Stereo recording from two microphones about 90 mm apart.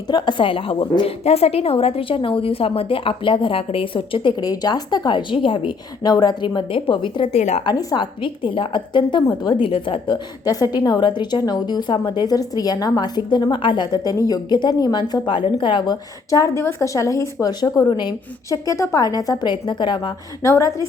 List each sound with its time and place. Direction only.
0.1 s a woman's voice: 55° left (ahead or behind)
6.0 s a woman's voice: 50° left (ahead or behind)
9.6 s a woman's voice: 75° left (ahead or behind)
10.4 s a woman's voice: 45° left (ahead or behind)
10.8 s a woman's voice: 55° left (ahead or behind)
13.9 s a woman's voice: 45° left (ahead or behind)
15.3 s a woman's voice: 60° left (ahead or behind)
16.3 s a woman's voice: 40° left (ahead or behind)
18.5 s a woman's voice: 35° left (ahead or behind)
19.0 s a woman's voice: 45° left (ahead or behind)
20.4 s a woman's voice: 35° left (ahead or behind)